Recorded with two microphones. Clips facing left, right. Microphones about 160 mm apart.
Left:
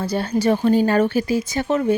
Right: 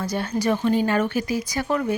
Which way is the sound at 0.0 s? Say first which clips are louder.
Left 4 dB; 30° left (ahead or behind).